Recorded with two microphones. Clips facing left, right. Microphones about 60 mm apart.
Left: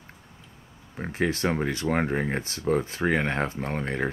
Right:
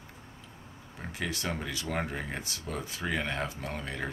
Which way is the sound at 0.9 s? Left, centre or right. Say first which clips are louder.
Left 9 dB; left.